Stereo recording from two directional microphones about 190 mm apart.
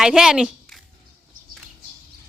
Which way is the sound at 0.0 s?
5° right (ahead or behind).